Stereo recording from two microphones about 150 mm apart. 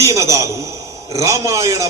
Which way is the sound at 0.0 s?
20° right (ahead or behind).